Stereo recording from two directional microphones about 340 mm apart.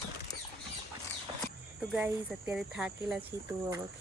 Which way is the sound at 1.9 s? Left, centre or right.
Centre.